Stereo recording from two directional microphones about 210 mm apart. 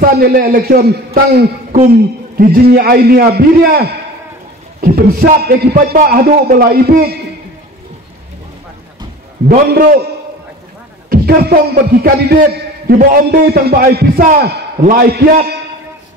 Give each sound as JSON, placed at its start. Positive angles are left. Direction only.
{"t": 0.0, "sound": "a man's voice", "side_deg": -45}
{"t": 4.8, "sound": "a man's voice", "side_deg": -45}
{"t": 9.5, "sound": "a man's voice", "side_deg": -45}
{"t": 11.1, "sound": "a man's voice", "side_deg": -45}